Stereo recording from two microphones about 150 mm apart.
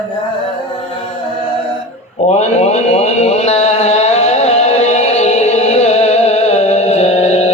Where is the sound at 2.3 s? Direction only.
45° left (ahead or behind).